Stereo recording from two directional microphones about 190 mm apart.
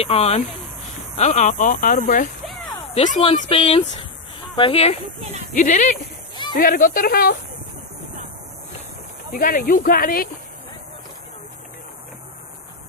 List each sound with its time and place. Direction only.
0.0 s speech: 30° left (ahead or behind)
2.9 s speech: 30° left (ahead or behind); by 7.3 s 50° left (ahead or behind)
9.3 s speech: 45° left (ahead or behind)